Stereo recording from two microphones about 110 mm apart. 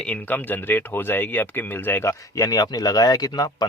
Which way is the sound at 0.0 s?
15° left (ahead or behind).